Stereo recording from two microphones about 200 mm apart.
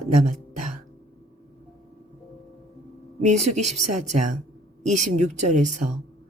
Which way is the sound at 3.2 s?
35° right (ahead or behind).